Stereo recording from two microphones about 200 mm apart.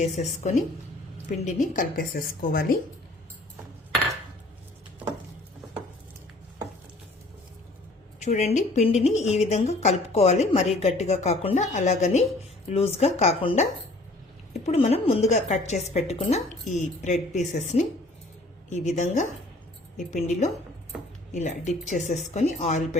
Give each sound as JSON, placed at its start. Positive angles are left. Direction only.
{"t": 0.0, "sound": "a woman's voice", "side_deg": 35}
{"t": 8.2, "sound": "speech", "side_deg": 35}